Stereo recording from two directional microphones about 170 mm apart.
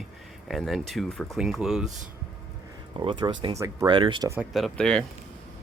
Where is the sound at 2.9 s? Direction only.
25° right (ahead or behind).